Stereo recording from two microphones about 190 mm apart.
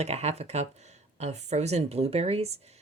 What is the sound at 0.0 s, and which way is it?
Speech, 35° right (ahead or behind).